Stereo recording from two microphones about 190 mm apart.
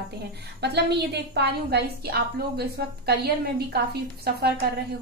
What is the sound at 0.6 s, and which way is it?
A woman's voice, 60° right (ahead or behind).